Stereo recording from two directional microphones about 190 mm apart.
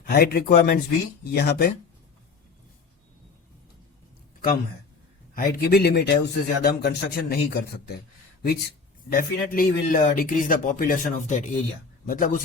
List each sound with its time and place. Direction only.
0.1 s a man's voice: 55° left (ahead or behind)
5.3 s a man's voice: 55° left (ahead or behind)
9.0 s speech: 45° left (ahead or behind)